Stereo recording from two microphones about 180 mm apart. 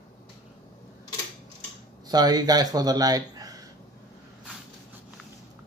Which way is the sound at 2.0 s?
20° right (ahead or behind).